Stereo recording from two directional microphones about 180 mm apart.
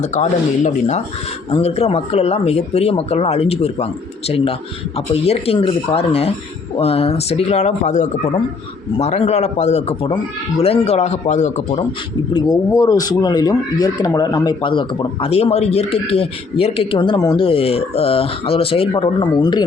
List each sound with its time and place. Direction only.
0.0 s speech: 40° left (ahead or behind)
12.3 s speech: 20° left (ahead or behind)